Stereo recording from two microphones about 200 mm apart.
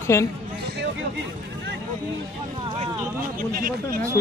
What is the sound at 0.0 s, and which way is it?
Speech, 15° left (ahead or behind).